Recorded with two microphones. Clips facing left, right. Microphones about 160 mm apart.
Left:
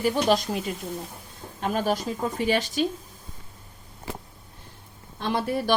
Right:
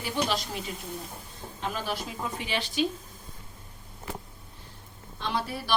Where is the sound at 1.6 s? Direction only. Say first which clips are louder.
Left 8 dB; 45° left (ahead or behind).